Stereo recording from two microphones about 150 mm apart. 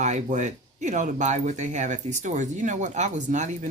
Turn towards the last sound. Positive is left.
turn(degrees=-55)  # may be behind; listen again after turning